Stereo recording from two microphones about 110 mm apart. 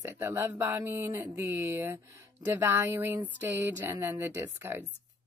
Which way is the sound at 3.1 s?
15° right (ahead or behind).